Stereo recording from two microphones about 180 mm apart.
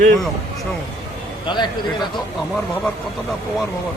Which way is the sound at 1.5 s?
25° left (ahead or behind).